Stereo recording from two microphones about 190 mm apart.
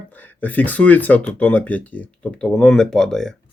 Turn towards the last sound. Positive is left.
turn(degrees=5)  # may be behind; listen again after turning